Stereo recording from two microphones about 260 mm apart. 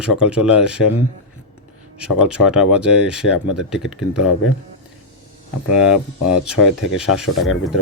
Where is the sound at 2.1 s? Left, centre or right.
Centre.